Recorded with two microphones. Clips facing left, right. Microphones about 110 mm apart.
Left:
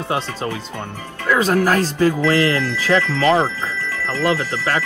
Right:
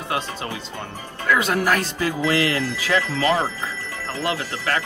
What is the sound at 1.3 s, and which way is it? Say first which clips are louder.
Speech: left 4 dB; 40° left (ahead or behind).